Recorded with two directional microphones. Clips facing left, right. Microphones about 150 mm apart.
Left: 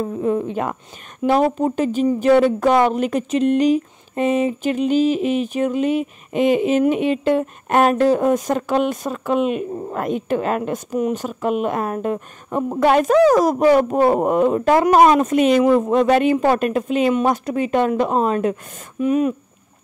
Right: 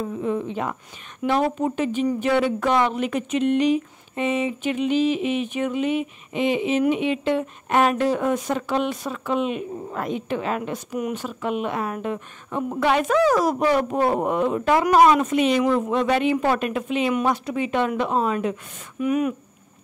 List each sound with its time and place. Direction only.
0.0 s a woman's voice: 45° left (ahead or behind)
1.2 s a woman's voice: 40° left (ahead or behind)
11.0 s speech: 30° left (ahead or behind)
11.2 s a woman's voice: 45° left (ahead or behind)
18.9 s speech: 30° left (ahead or behind)